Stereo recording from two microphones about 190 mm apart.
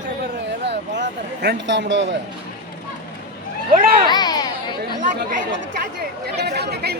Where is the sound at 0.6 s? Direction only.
65° right (ahead or behind).